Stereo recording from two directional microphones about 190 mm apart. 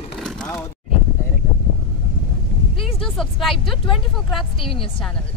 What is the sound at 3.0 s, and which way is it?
Speech, centre (ahead or behind).